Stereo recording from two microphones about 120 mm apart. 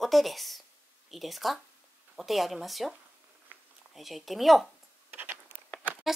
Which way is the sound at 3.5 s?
15° right (ahead or behind).